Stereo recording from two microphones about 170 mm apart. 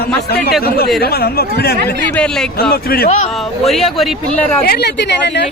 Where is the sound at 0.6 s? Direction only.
65° left (ahead or behind).